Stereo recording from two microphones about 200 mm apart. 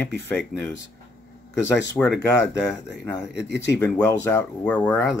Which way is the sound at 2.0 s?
Centre (ahead or behind).